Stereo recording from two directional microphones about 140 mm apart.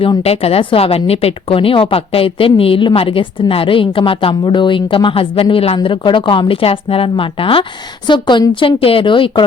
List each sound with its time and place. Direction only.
0.0 s speech: 45° left (ahead or behind)